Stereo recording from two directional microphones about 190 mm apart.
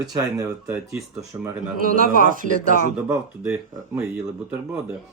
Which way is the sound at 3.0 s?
5° right (ahead or behind).